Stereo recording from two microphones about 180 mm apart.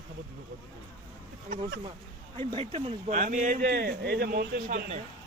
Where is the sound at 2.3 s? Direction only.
30° right (ahead or behind).